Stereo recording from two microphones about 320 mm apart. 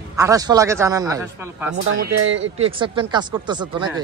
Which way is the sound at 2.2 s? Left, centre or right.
Right.